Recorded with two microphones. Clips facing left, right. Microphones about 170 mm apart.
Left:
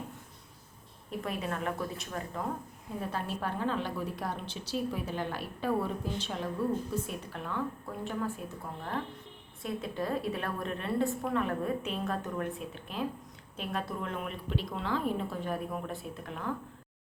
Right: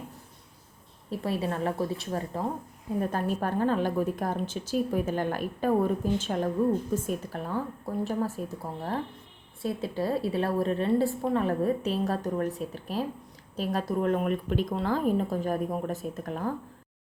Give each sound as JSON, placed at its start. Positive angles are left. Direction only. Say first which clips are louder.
{"t": 1.1, "sound": "a woman's voice", "louder": "right 5 dB", "side_deg": -30}
{"t": 3.0, "sound": "a woman's voice", "louder": "right 6 dB", "side_deg": -45}
{"t": 9.6, "sound": "a woman's voice", "louder": "right 5 dB", "side_deg": -30}